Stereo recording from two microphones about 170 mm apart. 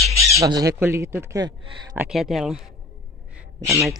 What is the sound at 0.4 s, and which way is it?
Speech, 20° right (ahead or behind).